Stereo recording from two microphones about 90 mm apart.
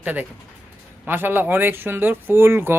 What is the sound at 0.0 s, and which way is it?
Speech, 20° right (ahead or behind).